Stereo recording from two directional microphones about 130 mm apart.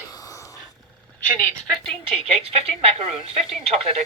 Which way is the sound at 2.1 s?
50° right (ahead or behind).